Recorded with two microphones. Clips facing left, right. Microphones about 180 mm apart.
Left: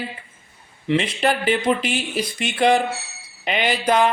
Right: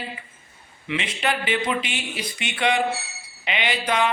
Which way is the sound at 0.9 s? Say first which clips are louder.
Left 6 dB; 40° left (ahead or behind).